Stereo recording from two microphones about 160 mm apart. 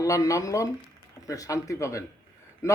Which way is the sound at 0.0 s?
20° left (ahead or behind).